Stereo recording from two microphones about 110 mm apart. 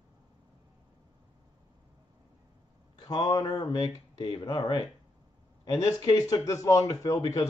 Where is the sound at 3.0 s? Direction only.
35° left (ahead or behind).